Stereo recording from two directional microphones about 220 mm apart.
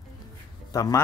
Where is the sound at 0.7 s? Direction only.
15° left (ahead or behind).